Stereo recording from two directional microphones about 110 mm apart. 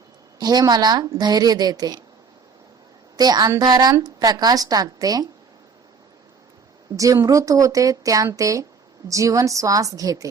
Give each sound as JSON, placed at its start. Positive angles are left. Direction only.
{"t": 0.3, "sound": "a woman's voice", "side_deg": -40}
{"t": 3.2, "sound": "a woman's voice", "side_deg": -35}
{"t": 6.9, "sound": "a woman's voice", "side_deg": -30}